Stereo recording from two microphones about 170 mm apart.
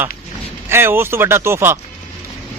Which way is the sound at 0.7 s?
15° right (ahead or behind).